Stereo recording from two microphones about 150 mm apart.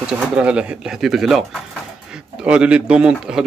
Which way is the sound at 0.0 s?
5° right (ahead or behind).